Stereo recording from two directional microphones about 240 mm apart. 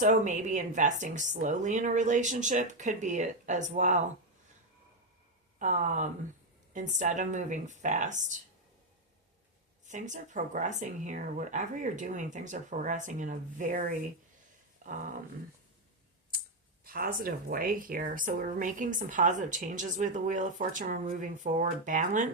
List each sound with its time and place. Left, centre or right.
0.0 s speech: right
5.5 s speech: right
9.8 s speech: right
16.8 s speech: right